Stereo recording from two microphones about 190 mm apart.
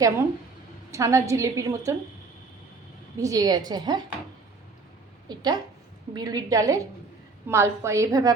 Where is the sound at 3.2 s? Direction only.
20° right (ahead or behind).